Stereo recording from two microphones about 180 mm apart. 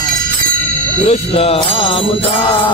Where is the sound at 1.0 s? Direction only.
35° left (ahead or behind).